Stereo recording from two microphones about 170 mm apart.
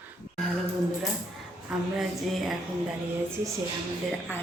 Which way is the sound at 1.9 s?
Centre (ahead or behind).